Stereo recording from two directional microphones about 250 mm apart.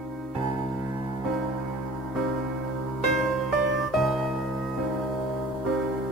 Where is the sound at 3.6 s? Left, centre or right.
Centre.